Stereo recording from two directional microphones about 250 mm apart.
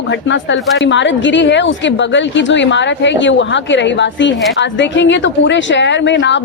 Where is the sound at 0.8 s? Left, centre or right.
Left.